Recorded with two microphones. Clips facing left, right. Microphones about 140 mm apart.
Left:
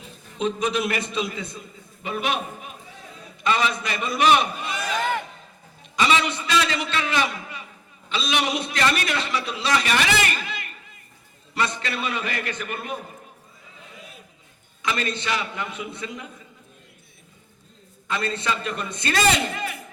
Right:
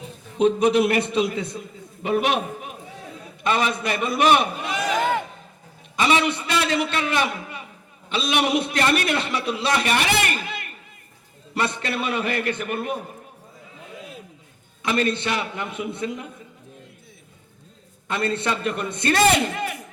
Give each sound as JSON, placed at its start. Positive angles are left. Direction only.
{"t": 0.3, "sound": "a man's voice", "side_deg": -60}
{"t": 3.4, "sound": "a man's voice", "side_deg": -55}
{"t": 4.7, "sound": "a sound", "side_deg": -90}
{"t": 4.9, "sound": "music", "side_deg": -15}
{"t": 6.1, "sound": "a man's voice", "side_deg": -55}
{"t": 14.8, "sound": "a man's voice", "side_deg": -55}
{"t": 18.1, "sound": "a man's voice", "side_deg": -55}